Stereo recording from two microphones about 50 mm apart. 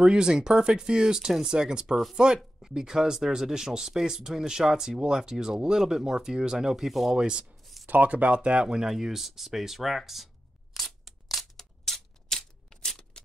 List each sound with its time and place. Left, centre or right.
0.0 s speech: centre
7.2 s speech: centre
7.8 s a sound: right; by 13.2 s centre